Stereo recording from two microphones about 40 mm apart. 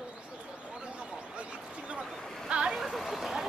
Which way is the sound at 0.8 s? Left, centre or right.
Right.